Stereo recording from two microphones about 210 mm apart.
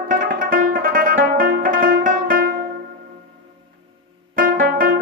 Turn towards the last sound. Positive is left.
turn(degrees=-45)  # may be behind; listen again after turning